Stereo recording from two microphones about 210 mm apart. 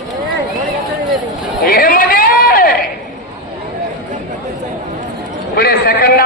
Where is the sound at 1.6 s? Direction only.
45° left (ahead or behind).